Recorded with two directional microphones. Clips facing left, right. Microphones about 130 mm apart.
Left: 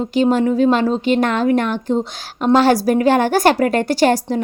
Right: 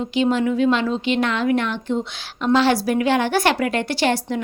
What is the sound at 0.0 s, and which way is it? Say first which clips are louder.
Speech: left 4 dB; 40° left (ahead or behind).